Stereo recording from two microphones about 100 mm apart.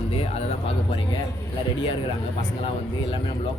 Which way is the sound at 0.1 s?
85° left.